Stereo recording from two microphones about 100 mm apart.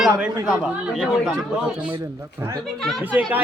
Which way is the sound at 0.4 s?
5° right (ahead or behind).